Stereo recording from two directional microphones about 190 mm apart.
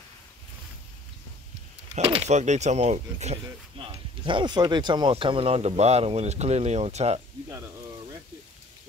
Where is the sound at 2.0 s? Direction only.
30° right (ahead or behind).